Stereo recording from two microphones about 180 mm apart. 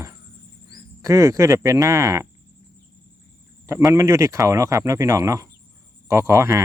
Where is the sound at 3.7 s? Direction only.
15° right (ahead or behind).